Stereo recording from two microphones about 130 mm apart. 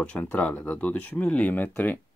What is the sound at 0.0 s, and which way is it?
Speech, 10° left (ahead or behind).